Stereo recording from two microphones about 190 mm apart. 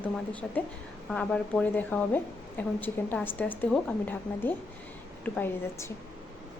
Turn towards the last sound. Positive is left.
turn(degrees=10)  # may be behind; listen again after turning